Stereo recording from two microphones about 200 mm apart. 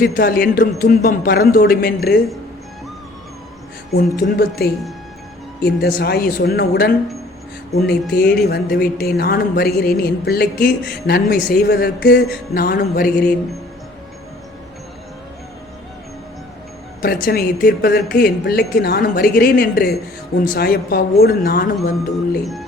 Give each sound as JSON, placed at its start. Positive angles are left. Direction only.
{"t": 0.0, "sound": "speech", "side_deg": 45}
{"t": 3.9, "sound": "speech", "side_deg": 50}
{"t": 17.0, "sound": "speech", "side_deg": 50}